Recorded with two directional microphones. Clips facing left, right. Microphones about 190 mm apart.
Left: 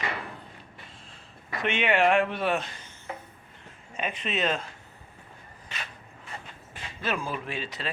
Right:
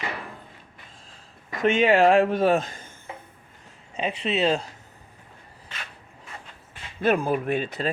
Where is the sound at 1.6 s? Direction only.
40° right (ahead or behind).